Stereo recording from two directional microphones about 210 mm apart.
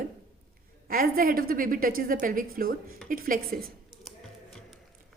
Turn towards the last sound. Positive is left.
turn(degrees=0)  # may be behind; listen again after turning